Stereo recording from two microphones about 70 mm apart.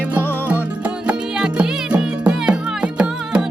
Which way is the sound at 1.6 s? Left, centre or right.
Centre.